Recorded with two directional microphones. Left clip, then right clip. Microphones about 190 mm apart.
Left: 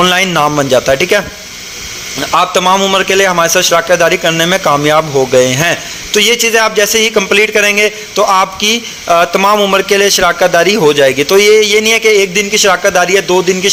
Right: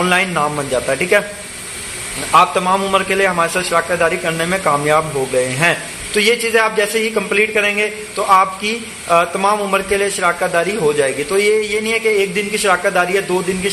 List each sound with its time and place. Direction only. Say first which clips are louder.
0.0 s a man's voice: left 6 dB; 45° left (ahead or behind)
2.3 s a man's voice: left 3 dB; 40° left (ahead or behind)